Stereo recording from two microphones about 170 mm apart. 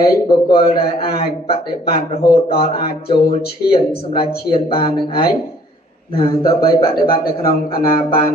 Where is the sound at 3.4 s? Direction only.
65° left (ahead or behind).